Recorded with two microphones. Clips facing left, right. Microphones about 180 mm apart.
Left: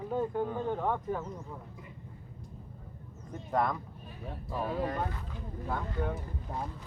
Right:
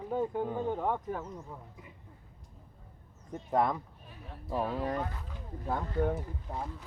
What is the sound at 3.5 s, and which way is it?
Speech, 25° right (ahead or behind).